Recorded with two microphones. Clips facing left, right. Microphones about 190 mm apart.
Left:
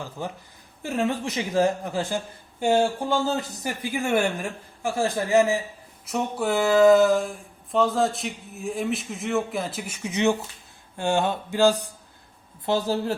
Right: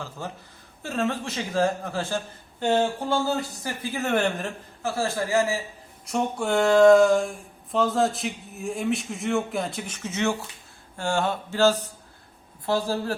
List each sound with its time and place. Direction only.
0.2 s a man's voice: 15° left (ahead or behind)
6.1 s a man's voice: 5° left (ahead or behind); by 13.1 s 20° left (ahead or behind)